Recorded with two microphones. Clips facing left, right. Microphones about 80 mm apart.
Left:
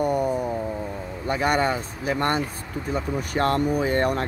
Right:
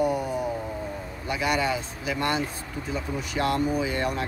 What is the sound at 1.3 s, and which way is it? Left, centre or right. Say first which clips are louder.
Speech: left 3 dB; left.